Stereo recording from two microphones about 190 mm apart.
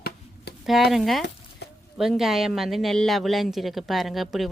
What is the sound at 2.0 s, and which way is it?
Speech, centre (ahead or behind).